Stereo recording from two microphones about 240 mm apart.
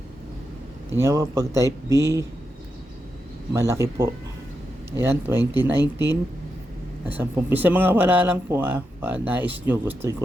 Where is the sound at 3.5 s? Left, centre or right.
Centre.